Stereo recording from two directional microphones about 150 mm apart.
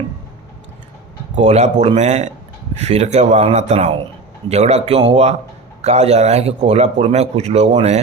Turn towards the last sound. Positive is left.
turn(degrees=-45)  # may be behind; listen again after turning